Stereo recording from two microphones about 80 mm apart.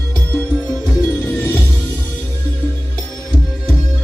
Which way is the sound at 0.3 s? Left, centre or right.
Centre.